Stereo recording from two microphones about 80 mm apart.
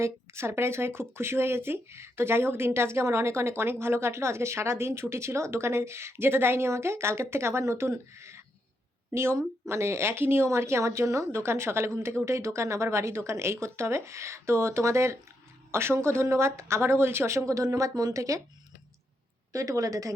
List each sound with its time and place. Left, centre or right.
0.0 s a woman's voice: right
19.5 s speech: right